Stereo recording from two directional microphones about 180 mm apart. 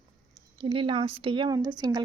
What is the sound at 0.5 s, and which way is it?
Speech, 30° right (ahead or behind).